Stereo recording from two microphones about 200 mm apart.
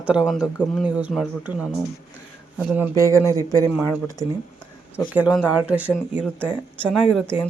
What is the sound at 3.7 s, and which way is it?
Speech, 5° right (ahead or behind).